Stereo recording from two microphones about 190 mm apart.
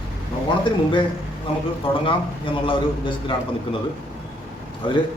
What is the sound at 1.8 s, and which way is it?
Speech, 25° left (ahead or behind).